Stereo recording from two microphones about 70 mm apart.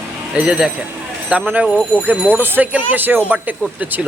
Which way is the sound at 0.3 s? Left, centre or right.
Centre.